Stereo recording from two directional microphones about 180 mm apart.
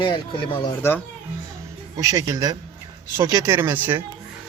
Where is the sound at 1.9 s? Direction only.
20° right (ahead or behind).